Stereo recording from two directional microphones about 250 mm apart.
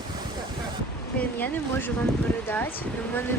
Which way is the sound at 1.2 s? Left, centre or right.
Centre.